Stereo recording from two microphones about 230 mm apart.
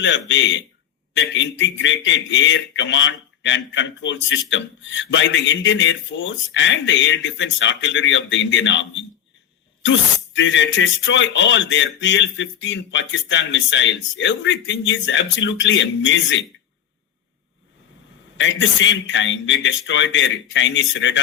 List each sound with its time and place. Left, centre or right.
0.0 s speech: left
18.3 s speech: left